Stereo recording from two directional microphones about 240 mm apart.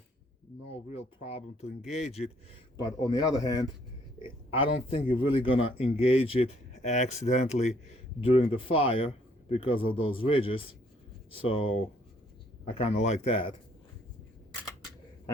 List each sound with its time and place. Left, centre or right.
0.7 s speech: left
2.7 s speech: centre